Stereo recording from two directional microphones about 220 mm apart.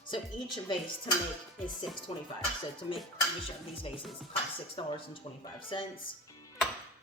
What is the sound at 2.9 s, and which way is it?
Speech, 25° left (ahead or behind).